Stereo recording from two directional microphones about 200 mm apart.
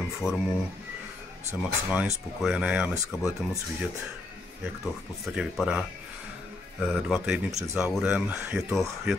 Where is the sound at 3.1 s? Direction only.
15° left (ahead or behind).